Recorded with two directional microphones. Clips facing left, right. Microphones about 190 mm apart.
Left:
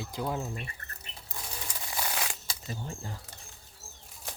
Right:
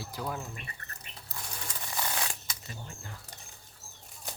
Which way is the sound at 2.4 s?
30° left (ahead or behind).